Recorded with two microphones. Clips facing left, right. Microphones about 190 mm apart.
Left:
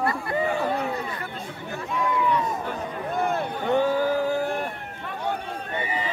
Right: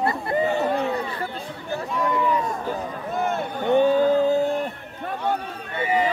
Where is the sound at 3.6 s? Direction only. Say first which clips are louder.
Right 5 dB; 20° right (ahead or behind).